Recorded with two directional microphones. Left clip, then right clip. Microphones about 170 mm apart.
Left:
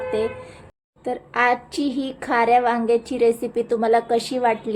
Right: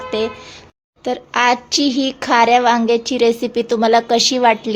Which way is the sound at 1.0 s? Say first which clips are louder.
Right 5 dB; 25° right (ahead or behind).